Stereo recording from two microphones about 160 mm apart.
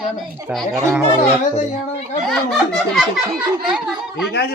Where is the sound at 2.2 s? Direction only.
Centre (ahead or behind).